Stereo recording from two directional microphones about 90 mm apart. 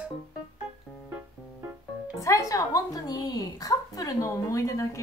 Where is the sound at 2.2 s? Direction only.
35° left (ahead or behind).